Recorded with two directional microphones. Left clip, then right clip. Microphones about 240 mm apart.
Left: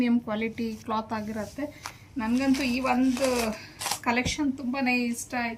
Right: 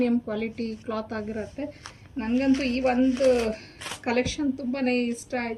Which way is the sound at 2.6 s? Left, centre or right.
Left.